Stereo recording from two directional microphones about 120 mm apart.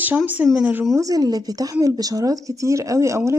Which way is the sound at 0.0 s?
15° right (ahead or behind).